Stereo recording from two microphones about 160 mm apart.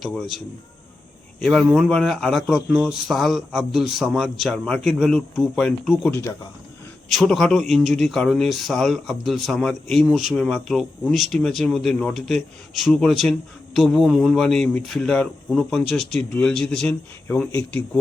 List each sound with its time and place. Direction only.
0.0 s speech: centre (ahead or behind)
6.1 s speech: 20° left (ahead or behind)
7.1 s speech: 5° left (ahead or behind)